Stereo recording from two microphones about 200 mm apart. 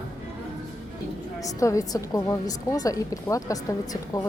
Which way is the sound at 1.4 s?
15° left (ahead or behind).